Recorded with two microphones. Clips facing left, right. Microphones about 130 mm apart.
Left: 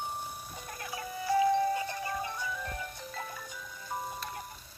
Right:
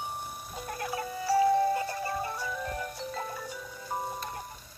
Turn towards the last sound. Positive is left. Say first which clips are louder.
# right 3 dB
turn(degrees=-30)  # may be behind; listen again after turning